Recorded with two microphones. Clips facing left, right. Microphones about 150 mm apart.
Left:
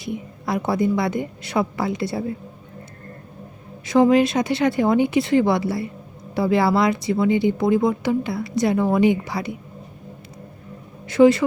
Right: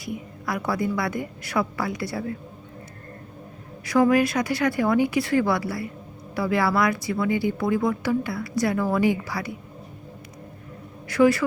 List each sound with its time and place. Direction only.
0.0 s speech: 25° left (ahead or behind)
3.8 s speech: 25° left (ahead or behind)
11.1 s speech: 20° left (ahead or behind)